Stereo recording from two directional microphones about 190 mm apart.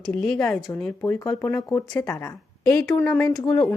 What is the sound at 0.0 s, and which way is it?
Speech, centre (ahead or behind).